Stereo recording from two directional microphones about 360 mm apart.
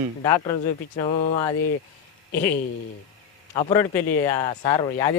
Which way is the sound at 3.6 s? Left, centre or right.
Centre.